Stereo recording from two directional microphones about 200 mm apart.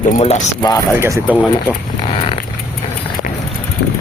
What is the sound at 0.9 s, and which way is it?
Speech, 10° right (ahead or behind).